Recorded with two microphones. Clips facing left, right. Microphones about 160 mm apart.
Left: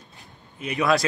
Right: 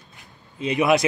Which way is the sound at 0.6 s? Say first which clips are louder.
Right 3 dB; 20° right (ahead or behind).